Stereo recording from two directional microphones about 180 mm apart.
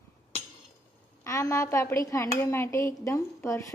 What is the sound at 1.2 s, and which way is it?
A woman's voice, 15° left (ahead or behind).